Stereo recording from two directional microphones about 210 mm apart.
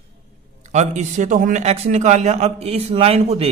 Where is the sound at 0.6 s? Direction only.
35° right (ahead or behind).